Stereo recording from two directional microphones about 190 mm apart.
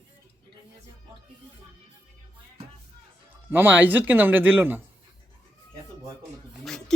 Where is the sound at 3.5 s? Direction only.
10° right (ahead or behind).